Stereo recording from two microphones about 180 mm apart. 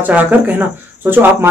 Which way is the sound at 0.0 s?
10° right (ahead or behind).